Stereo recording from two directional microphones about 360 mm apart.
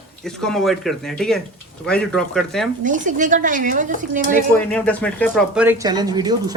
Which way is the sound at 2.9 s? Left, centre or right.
Right.